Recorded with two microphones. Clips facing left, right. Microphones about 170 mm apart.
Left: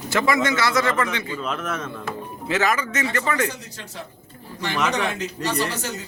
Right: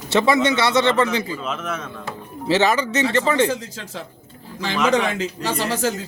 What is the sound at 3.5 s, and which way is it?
Speech, 90° right.